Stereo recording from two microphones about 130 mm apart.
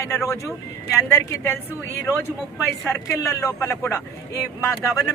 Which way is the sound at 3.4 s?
20° left (ahead or behind).